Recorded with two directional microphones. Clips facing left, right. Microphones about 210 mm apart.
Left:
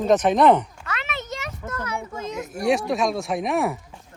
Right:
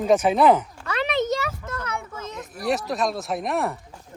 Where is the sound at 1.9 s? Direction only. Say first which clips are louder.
Left 3 dB; 15° left (ahead or behind).